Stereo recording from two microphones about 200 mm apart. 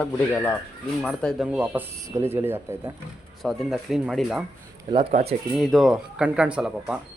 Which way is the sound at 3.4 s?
Centre (ahead or behind).